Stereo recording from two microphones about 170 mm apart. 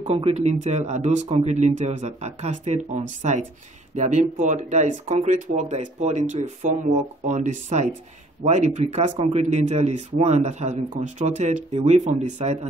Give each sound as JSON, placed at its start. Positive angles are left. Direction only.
{"t": 0.0, "sound": "a man's voice", "side_deg": -40}